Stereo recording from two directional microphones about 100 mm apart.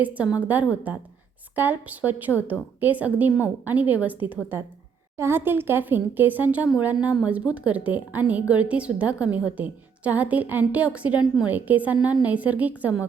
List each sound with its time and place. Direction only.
0.0 s a woman's voice: 15° right (ahead or behind)